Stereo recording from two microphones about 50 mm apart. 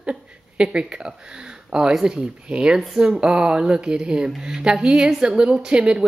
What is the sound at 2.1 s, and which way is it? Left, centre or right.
A woman's voice, right.